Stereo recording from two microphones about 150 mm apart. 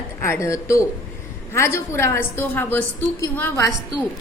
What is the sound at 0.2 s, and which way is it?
A woman's voice, 20° left (ahead or behind).